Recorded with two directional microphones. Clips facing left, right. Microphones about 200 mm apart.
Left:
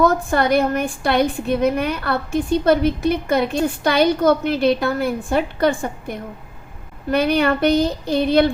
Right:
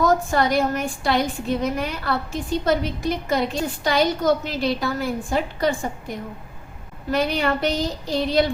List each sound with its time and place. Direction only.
0.0 s a woman's voice: 55° left (ahead or behind)
7.1 s a woman's voice: 60° left (ahead or behind)